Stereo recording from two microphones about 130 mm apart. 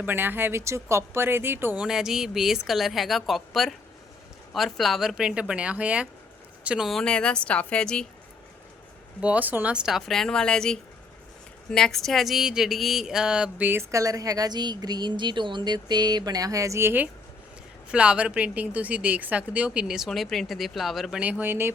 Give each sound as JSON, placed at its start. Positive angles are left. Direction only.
{"t": 0.0, "sound": "a woman's voice", "side_deg": -15}
{"t": 9.2, "sound": "speech", "side_deg": -10}